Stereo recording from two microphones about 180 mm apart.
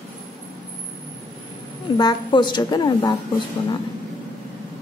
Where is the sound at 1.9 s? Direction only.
25° left (ahead or behind).